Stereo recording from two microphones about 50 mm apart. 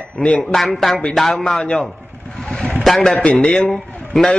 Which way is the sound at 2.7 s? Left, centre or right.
Centre.